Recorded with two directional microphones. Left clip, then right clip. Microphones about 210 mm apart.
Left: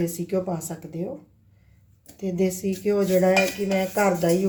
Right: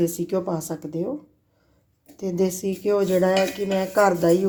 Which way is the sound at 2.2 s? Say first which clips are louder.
Right 2 dB; 30° right (ahead or behind).